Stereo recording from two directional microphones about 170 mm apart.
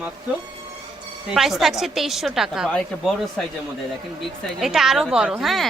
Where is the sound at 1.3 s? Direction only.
Centre (ahead or behind).